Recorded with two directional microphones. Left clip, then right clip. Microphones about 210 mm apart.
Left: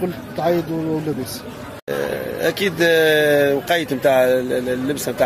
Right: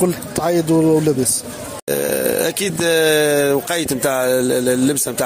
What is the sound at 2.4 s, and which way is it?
Speech, 50° right (ahead or behind).